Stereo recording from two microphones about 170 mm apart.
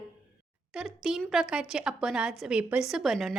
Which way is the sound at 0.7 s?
Centre (ahead or behind).